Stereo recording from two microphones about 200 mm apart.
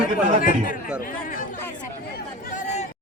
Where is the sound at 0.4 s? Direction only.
45° left (ahead or behind).